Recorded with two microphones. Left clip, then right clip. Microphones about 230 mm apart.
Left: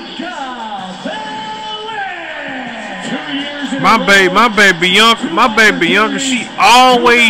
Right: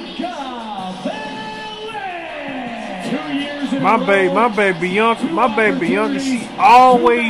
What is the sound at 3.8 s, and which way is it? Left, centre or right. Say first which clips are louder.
A man's voice: left 6 dB; centre.